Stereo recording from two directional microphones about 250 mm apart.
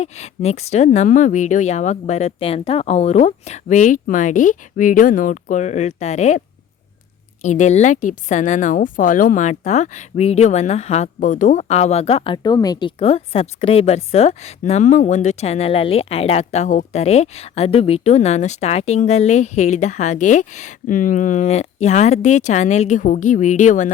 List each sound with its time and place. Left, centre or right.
0.0 s a woman's voice: left
7.4 s a woman's voice: left